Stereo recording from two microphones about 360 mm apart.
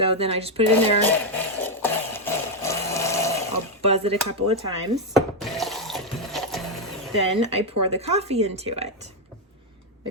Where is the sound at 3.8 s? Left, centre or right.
Centre.